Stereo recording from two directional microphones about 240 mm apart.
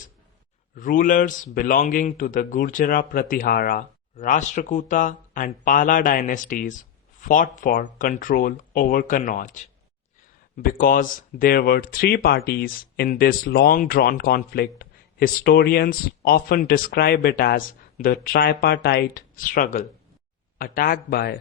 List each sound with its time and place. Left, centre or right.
0.8 s speech: left